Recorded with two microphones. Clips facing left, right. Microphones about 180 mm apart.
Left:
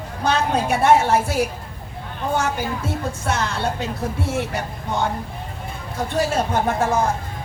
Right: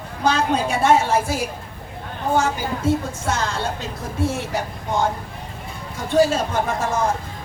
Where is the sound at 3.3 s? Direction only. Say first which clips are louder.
Even; 60° left (ahead or behind).